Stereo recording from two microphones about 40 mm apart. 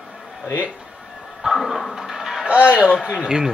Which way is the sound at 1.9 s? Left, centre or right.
Centre.